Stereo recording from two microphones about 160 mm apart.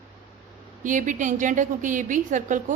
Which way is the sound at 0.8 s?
55° right (ahead or behind).